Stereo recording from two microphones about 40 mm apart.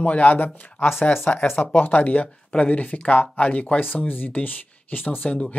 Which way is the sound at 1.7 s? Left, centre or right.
Left.